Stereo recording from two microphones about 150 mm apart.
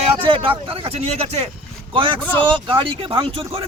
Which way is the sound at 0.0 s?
40° right (ahead or behind).